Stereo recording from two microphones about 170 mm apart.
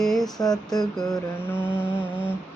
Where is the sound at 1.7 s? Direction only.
10° right (ahead or behind).